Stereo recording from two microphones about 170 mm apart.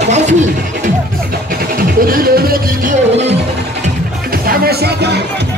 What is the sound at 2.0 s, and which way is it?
Music, 60° right (ahead or behind).